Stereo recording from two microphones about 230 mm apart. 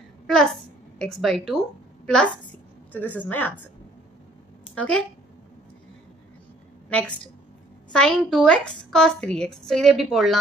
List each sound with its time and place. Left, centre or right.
0.3 s a woman's voice: centre
4.7 s a woman's voice: centre
6.9 s a woman's voice: centre